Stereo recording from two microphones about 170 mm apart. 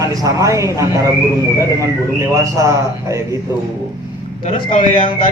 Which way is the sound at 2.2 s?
20° right (ahead or behind).